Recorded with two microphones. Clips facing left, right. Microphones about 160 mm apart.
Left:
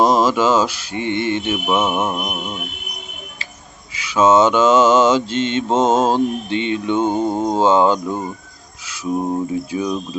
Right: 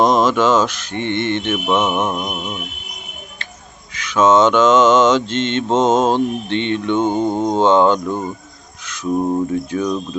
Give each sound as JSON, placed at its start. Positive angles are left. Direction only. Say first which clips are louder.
{"t": 0.0, "sound": "mantra", "louder": "right 1 dB", "side_deg": 10}
{"t": 3.9, "sound": "mantra", "louder": "even", "side_deg": 10}
{"t": 9.5, "sound": "mantra", "louder": "right 2 dB", "side_deg": 10}